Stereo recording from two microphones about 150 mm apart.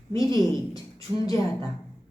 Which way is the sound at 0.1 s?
20° left (ahead or behind).